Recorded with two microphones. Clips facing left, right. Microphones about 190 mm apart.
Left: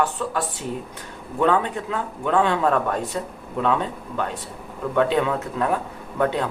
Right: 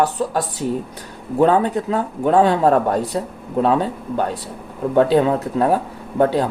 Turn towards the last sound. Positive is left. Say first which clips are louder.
# right 6 dB
turn(degrees=-35)  # may be behind; listen again after turning